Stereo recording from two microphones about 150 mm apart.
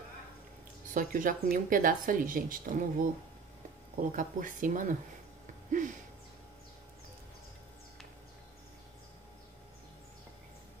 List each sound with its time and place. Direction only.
0.9 s speech: 65° right (ahead or behind)